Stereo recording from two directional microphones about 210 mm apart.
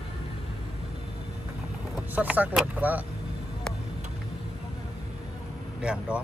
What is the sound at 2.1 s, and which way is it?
Speech, 10° right (ahead or behind).